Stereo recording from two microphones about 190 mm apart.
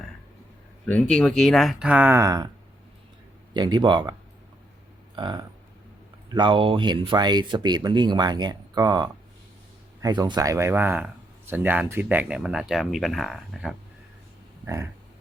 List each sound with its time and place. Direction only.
0.9 s speech: 5° left (ahead or behind); by 2.5 s 15° right (ahead or behind)
3.5 s speech: 25° right (ahead or behind)
5.1 s speech: 25° right (ahead or behind); by 13.7 s centre (ahead or behind)